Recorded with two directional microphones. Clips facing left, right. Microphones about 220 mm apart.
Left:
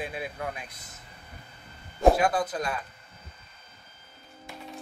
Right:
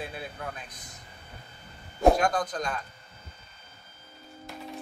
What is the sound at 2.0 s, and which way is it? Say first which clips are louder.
Speech: left 1 dB; 5° left (ahead or behind).